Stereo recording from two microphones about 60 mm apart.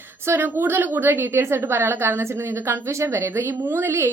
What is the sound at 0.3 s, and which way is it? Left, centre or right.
A woman's voice, right.